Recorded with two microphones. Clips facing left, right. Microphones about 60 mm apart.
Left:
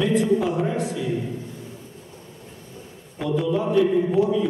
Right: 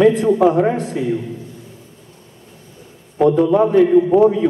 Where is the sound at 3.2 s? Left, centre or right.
Right.